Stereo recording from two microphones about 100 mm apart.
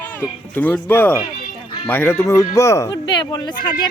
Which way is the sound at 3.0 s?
45° left (ahead or behind).